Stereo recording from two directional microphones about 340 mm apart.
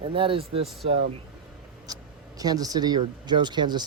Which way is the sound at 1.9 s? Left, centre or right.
Centre.